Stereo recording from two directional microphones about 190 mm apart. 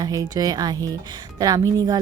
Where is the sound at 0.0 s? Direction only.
20° right (ahead or behind).